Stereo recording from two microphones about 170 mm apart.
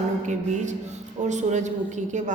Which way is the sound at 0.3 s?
45° right (ahead or behind).